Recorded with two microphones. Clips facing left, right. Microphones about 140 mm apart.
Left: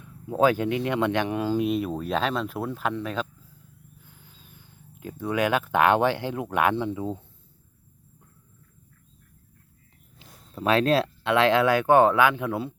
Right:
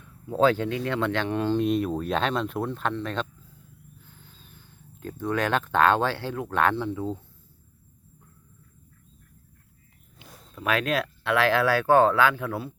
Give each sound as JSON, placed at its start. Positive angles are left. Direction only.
{"t": 0.0, "sound": "speech", "side_deg": 15}
{"t": 10.5, "sound": "speech", "side_deg": 30}